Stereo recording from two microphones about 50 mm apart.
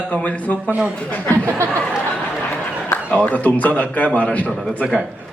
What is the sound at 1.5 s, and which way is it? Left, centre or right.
Speech, right.